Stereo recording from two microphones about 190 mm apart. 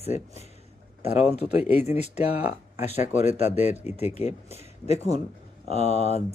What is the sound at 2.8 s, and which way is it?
Speech, 35° left (ahead or behind).